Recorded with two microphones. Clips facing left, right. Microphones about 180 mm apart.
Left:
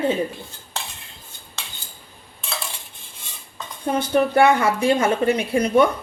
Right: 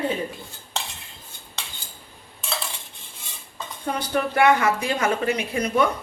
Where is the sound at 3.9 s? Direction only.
25° left (ahead or behind).